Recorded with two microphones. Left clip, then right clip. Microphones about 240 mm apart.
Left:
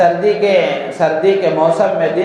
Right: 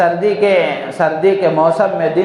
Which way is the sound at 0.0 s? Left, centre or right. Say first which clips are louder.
Left 1 dB; right.